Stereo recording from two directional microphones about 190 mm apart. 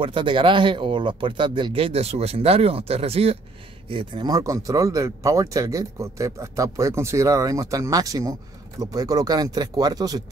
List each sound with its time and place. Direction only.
0.0 s speech: 25° right (ahead or behind)